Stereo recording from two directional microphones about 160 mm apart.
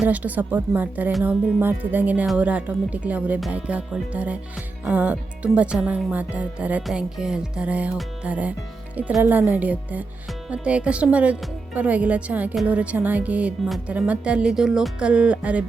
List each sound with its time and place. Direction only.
0.0 s a woman's voice: 10° right (ahead or behind)